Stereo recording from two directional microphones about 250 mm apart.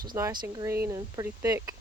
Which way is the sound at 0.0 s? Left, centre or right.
Centre.